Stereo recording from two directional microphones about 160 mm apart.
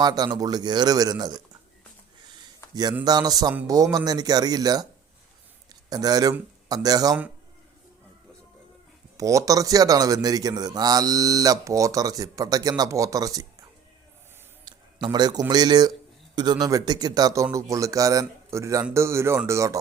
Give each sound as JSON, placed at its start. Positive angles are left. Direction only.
{"t": 0.0, "sound": "a man's voice", "side_deg": -25}
{"t": 3.0, "sound": "a man's voice", "side_deg": -25}
{"t": 5.9, "sound": "a man's voice", "side_deg": -25}
{"t": 9.1, "sound": "a man's voice", "side_deg": -20}